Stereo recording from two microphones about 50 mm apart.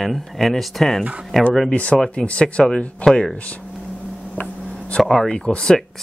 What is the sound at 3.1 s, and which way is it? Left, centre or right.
Speech, centre.